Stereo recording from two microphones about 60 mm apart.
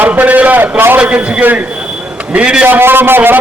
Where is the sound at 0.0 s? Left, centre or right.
Right.